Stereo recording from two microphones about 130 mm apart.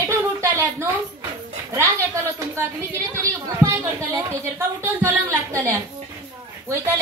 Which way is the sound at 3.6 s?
25° right (ahead or behind).